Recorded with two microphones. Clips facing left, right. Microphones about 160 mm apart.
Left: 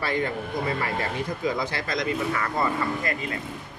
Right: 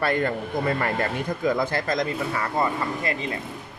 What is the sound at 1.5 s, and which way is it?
Speech, 50° right (ahead or behind).